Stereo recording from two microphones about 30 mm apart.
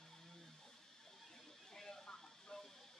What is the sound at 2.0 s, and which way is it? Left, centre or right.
Vehicle, left.